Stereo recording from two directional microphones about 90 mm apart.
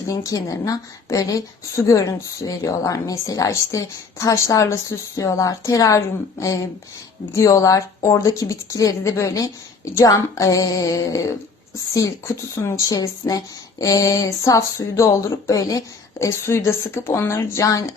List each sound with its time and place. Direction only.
0.1 s speech: 40° left (ahead or behind)